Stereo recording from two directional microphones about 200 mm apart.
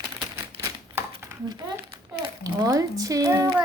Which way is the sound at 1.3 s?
15° right (ahead or behind).